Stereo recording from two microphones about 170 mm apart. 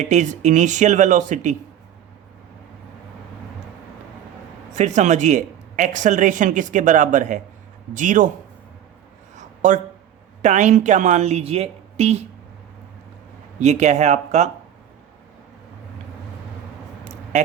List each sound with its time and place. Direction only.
0.0 s a woman's voice: 45° right (ahead or behind)
4.7 s a woman's voice: 45° right (ahead or behind)
9.3 s a sound: 45° right (ahead or behind)
10.4 s a woman's voice: 45° right (ahead or behind)
13.6 s speech: 40° right (ahead or behind)